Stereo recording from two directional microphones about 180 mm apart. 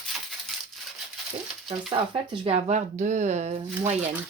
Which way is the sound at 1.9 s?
30° right (ahead or behind).